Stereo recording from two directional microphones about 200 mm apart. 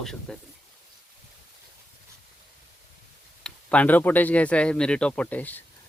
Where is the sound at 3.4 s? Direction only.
5° left (ahead or behind).